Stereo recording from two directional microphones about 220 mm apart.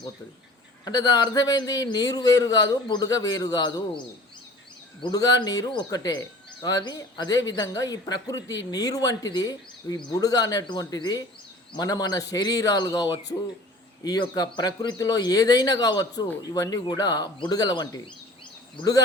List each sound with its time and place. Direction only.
0.9 s a man's voice: 15° left (ahead or behind)
5.0 s a man's voice: 15° left (ahead or behind)